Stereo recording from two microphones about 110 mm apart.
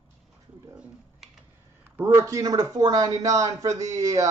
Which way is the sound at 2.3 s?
35° right (ahead or behind).